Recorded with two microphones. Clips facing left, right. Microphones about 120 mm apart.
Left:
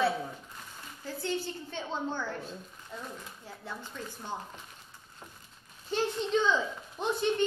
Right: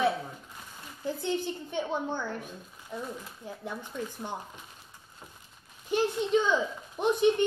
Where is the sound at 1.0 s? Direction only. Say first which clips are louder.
Right 4 dB; 20° right (ahead or behind).